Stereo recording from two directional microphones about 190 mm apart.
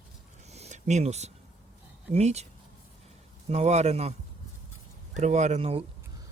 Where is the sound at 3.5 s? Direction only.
35° right (ahead or behind).